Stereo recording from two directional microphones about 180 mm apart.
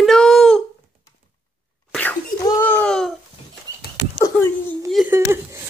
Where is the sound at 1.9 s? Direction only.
10° left (ahead or behind).